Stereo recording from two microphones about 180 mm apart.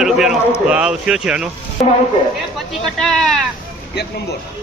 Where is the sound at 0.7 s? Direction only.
5° right (ahead or behind).